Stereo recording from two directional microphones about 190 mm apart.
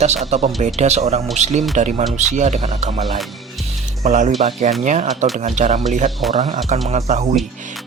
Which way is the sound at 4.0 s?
35° right (ahead or behind).